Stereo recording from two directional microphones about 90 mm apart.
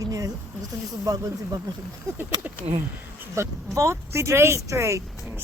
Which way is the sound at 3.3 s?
30° right (ahead or behind).